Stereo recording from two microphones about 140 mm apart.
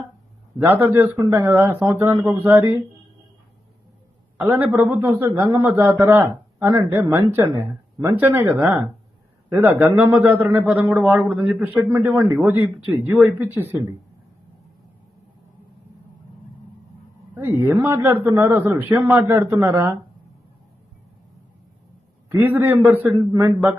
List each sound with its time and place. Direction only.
0.6 s a man's voice: 15° right (ahead or behind)
4.4 s a man's voice: 10° right (ahead or behind)
17.3 s a man's voice: 15° right (ahead or behind)
22.3 s a man's voice: 15° right (ahead or behind)